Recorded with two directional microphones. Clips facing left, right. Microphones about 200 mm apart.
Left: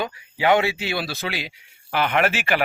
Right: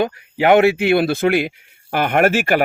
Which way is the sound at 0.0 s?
55° right (ahead or behind).